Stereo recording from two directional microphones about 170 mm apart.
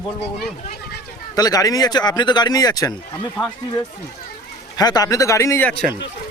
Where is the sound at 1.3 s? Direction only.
20° left (ahead or behind).